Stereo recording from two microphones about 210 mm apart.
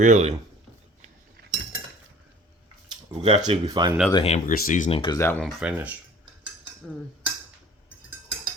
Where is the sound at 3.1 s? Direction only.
20° right (ahead or behind).